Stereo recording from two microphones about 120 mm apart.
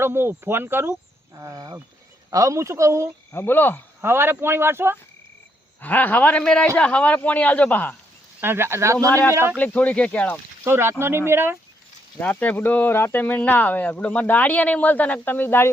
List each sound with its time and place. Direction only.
0.0 s a man's voice: 20° right (ahead or behind)
3.3 s speech: 15° left (ahead or behind)
4.0 s a man's voice: 20° right (ahead or behind)
5.8 s speech: 15° left (ahead or behind)
8.4 s a man's voice: 20° right (ahead or behind)
9.6 s speech: 10° left (ahead or behind)
10.6 s a man's voice: 20° right (ahead or behind)
12.2 s speech: 15° left (ahead or behind)